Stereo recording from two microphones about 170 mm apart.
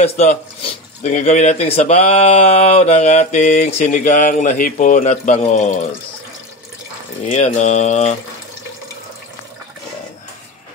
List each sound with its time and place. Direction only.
0.0 s speech: 40° left (ahead or behind)
7.2 s speech: 40° left (ahead or behind)